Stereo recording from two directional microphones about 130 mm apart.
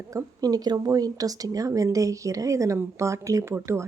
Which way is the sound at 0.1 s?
25° right (ahead or behind).